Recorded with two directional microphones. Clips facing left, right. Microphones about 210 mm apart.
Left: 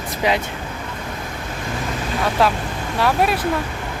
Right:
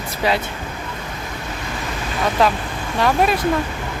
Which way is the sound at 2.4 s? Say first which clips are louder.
Right 1 dB; centre (ahead or behind).